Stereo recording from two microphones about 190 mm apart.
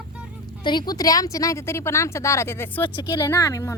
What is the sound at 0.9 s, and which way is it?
Speech, 20° left (ahead or behind).